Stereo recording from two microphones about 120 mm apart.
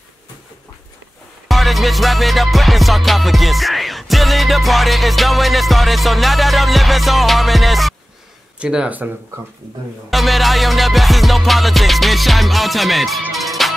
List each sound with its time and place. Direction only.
1.5 s music: centre (ahead or behind)
8.5 s speech: 10° right (ahead or behind)
10.1 s music: centre (ahead or behind)